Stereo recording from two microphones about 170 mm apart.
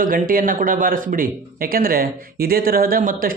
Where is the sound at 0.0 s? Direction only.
55° right (ahead or behind).